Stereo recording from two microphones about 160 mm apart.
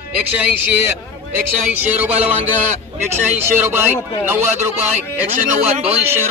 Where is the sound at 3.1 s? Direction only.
15° right (ahead or behind).